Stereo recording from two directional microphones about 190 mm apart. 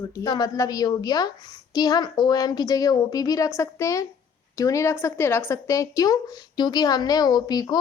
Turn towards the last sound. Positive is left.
turn(degrees=20)  # may be behind; listen again after turning